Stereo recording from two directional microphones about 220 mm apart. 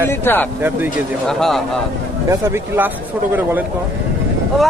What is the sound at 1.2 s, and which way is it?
Speech, centre (ahead or behind).